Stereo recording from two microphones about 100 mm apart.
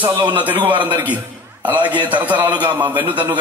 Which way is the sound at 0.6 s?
55° right (ahead or behind).